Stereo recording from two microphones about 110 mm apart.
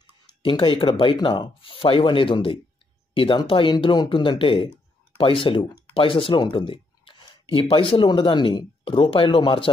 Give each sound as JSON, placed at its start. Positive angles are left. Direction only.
{"t": 0.4, "sound": "speech", "side_deg": 50}